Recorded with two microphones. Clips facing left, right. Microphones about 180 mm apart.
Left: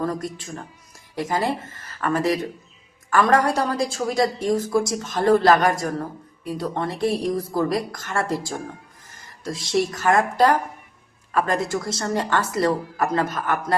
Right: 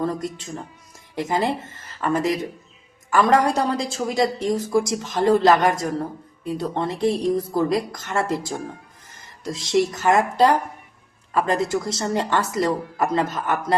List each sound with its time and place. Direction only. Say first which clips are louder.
1.1 s a woman's voice: right 1 dB; 20° right (ahead or behind)